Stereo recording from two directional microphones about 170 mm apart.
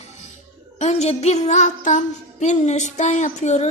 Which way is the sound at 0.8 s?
40° left (ahead or behind).